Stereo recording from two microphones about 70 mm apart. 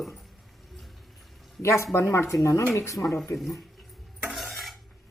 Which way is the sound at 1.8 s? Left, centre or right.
Left.